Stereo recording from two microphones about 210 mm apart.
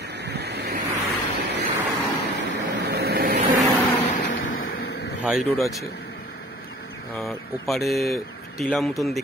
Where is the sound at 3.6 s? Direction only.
10° left (ahead or behind).